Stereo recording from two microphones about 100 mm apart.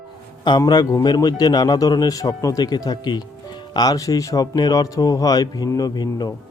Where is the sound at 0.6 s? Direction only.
40° left (ahead or behind).